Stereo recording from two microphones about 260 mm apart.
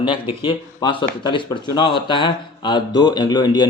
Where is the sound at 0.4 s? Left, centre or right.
Centre.